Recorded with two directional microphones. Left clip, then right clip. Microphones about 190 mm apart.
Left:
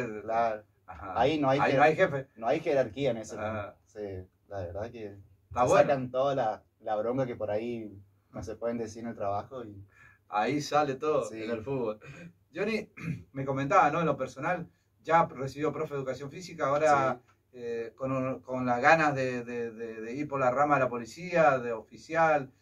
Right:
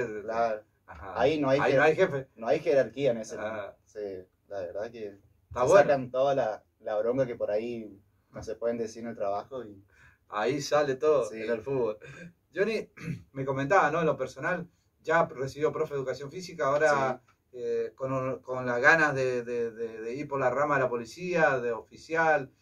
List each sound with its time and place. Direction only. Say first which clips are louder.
0.3 s a man's voice: left 1 dB; centre (ahead or behind)
1.8 s speech: even; 20° right (ahead or behind)
2.3 s a man's voice: right 2 dB; centre (ahead or behind)
3.3 s speech: even; 20° right (ahead or behind)
3.9 s speech: right 5 dB; centre (ahead or behind)
5.5 s speech: right 2 dB; 20° right (ahead or behind)
5.9 s a man's voice: right 2 dB; 5° right (ahead or behind)
10.3 s speech: right 1 dB; 20° right (ahead or behind)